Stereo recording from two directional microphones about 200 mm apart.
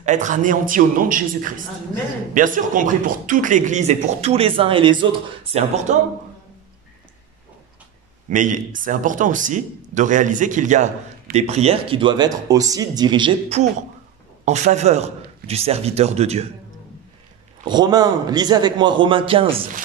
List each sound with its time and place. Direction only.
0.0 s a man's voice: 40° right (ahead or behind)
5.9 s a man's voice: 35° right (ahead or behind)
8.3 s a man's voice: 40° right (ahead or behind)
17.6 s a man's voice: 20° right (ahead or behind)